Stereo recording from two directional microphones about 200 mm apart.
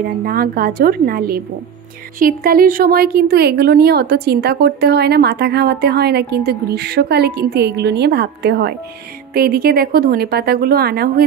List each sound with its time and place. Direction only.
0.2 s speech: 50° right (ahead or behind)